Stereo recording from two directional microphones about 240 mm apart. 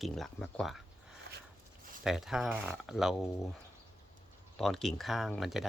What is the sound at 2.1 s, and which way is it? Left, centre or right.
Speech, centre.